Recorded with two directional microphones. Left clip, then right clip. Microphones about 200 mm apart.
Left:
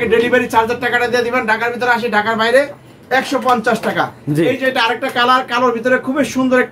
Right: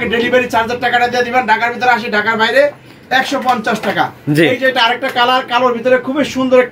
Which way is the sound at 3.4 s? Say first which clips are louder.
Even; 15° left (ahead or behind).